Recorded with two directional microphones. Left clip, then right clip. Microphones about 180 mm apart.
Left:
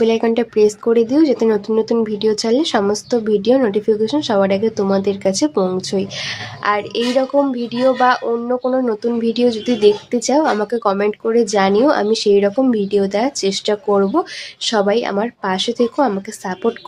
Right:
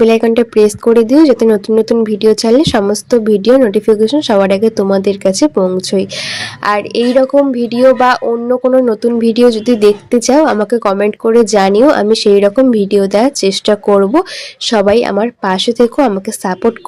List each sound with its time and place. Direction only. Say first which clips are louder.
0.0 s speech: right 7 dB; 30° right (ahead or behind)